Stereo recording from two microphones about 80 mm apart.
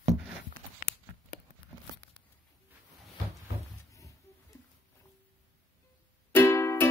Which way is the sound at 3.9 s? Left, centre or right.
Left.